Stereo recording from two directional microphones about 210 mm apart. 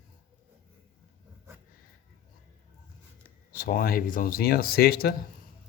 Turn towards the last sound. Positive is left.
turn(degrees=45)  # may be behind; listen again after turning